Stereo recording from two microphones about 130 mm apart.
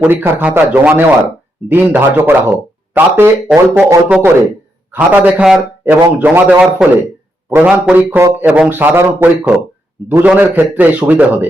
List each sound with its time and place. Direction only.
0.0 s speech: 15° right (ahead or behind)